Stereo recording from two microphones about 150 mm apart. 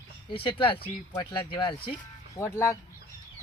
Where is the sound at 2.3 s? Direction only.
20° left (ahead or behind).